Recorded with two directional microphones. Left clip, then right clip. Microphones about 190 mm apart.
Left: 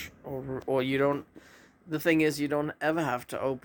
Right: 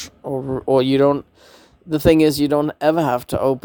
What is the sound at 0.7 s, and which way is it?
Speech, 55° right (ahead or behind).